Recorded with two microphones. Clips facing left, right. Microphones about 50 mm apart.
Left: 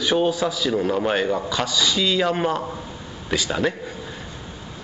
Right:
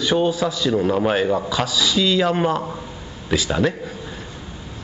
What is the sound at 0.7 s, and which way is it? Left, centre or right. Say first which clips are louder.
Speech: right 3 dB; right.